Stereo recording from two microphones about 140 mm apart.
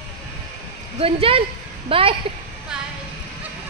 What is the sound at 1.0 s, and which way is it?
Speech, 40° right (ahead or behind).